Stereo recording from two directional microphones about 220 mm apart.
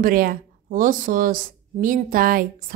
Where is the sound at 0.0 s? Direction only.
40° right (ahead or behind).